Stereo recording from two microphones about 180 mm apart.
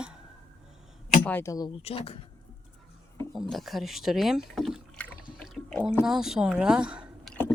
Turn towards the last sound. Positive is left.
turn(degrees=-5)  # may be behind; listen again after turning